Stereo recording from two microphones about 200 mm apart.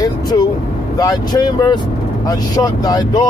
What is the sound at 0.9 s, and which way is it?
Speech, 20° left (ahead or behind).